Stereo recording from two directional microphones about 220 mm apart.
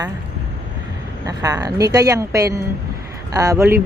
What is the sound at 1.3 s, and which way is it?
Speech, 15° right (ahead or behind).